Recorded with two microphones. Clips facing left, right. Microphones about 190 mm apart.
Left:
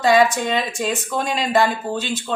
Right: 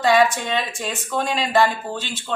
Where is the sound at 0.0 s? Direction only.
15° left (ahead or behind).